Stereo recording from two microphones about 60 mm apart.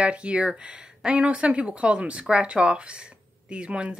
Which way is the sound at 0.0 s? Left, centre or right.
Centre.